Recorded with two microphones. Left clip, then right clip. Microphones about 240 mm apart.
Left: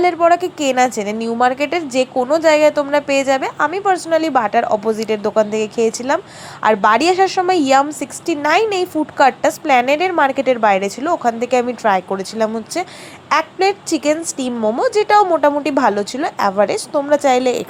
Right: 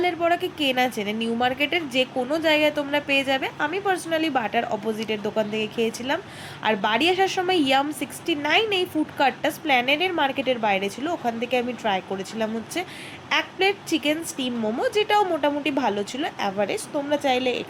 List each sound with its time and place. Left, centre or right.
0.0 s a woman's voice: centre